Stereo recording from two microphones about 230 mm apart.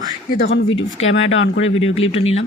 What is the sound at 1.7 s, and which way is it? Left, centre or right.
Speech, left.